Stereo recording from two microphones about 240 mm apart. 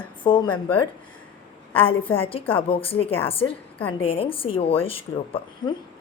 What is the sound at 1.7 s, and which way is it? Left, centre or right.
A woman's voice, left.